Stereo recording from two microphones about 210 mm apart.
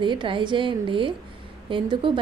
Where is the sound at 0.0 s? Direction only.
20° right (ahead or behind).